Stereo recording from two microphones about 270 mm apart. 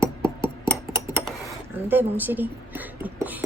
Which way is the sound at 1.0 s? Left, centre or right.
Centre.